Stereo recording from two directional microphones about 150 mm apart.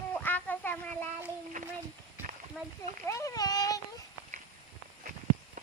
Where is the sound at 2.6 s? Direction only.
Centre (ahead or behind).